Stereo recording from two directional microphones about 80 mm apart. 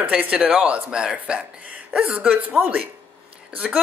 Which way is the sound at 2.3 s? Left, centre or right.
Right.